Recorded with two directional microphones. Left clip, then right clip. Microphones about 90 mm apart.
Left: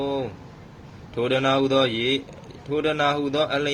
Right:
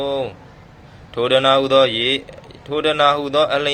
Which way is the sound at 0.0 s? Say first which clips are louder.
Right 5 dB; 30° left (ahead or behind).